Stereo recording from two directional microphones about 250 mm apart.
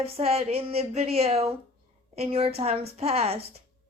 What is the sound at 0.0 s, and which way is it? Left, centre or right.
Speech, right.